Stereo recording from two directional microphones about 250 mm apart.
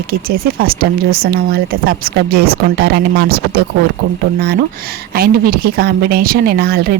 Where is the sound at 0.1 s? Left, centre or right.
Right.